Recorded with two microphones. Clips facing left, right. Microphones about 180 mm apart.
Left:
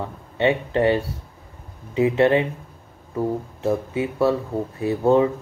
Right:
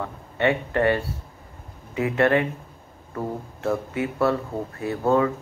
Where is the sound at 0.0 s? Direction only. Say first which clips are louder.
Left 2 dB; 20° left (ahead or behind).